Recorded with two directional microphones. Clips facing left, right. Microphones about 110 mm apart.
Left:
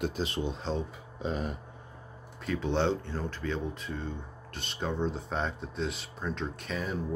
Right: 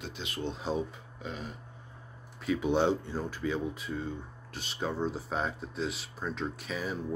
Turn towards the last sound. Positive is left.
turn(degrees=0)  # may be behind; listen again after turning